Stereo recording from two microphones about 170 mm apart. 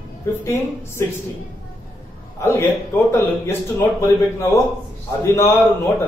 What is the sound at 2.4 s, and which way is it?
A man's voice, 15° left (ahead or behind).